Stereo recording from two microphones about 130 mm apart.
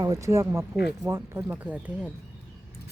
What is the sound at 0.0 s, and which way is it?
Speech, 25° right (ahead or behind).